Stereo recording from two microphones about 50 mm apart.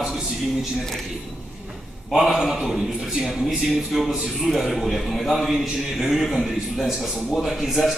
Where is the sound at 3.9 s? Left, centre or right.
Centre.